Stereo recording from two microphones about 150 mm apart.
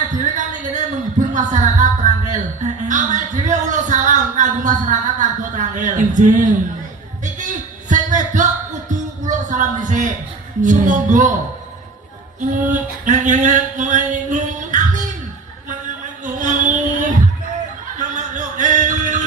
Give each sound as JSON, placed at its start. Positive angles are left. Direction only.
{"t": 0.1, "sound": "speech", "side_deg": -55}
{"t": 7.3, "sound": "music", "side_deg": -55}
{"t": 10.6, "sound": "speech", "side_deg": -55}
{"t": 12.4, "sound": "a sound", "side_deg": -60}
{"t": 16.2, "sound": "a sound", "side_deg": -55}
{"t": 17.9, "sound": "music", "side_deg": -55}